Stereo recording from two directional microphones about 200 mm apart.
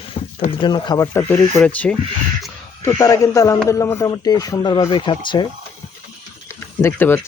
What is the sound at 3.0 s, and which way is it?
A man's voice, 15° left (ahead or behind).